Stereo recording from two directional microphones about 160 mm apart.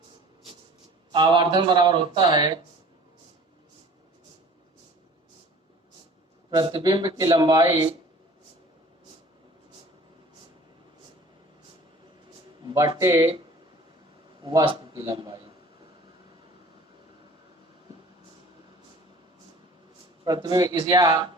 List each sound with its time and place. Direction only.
1.1 s speech: 30° right (ahead or behind)
6.5 s speech: 25° right (ahead or behind)
12.6 s speech: 25° right (ahead or behind)
14.4 s speech: 30° right (ahead or behind)
20.2 s speech: 25° right (ahead or behind)